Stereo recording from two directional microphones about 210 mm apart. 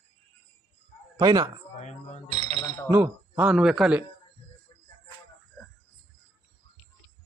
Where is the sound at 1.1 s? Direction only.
15° right (ahead or behind).